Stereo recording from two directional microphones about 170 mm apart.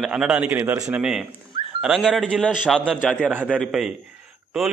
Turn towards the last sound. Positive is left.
turn(degrees=-5)  # may be behind; listen again after turning